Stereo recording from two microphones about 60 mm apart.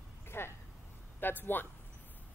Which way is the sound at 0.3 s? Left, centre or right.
Left.